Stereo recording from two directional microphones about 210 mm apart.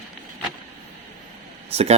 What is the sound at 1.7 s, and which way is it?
Speech, 30° right (ahead or behind).